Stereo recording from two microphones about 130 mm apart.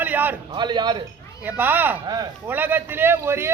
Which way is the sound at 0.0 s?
15° right (ahead or behind).